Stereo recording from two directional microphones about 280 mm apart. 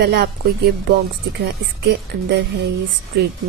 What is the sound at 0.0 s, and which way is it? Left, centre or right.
Speech, right.